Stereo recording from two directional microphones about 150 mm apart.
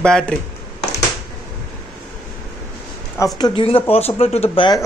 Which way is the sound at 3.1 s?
25° left (ahead or behind).